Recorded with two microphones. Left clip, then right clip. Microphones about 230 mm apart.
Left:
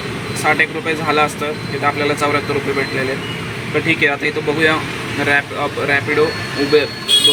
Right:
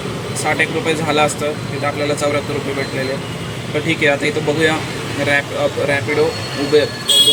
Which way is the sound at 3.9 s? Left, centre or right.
Centre.